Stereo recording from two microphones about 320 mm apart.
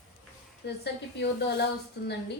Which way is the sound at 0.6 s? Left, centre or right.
Left.